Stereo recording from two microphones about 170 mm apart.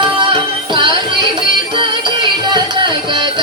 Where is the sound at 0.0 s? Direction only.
30° right (ahead or behind).